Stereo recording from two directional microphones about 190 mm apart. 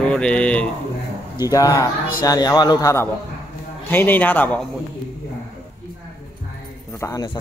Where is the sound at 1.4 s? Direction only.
20° left (ahead or behind).